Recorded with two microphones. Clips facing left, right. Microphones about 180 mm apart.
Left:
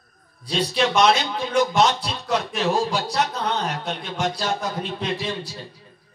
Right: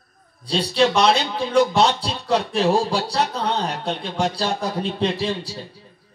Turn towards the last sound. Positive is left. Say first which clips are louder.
# right 3 dB
turn(degrees=-30)  # may be behind; listen again after turning